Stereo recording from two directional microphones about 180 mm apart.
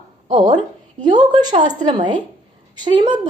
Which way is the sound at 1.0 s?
25° right (ahead or behind).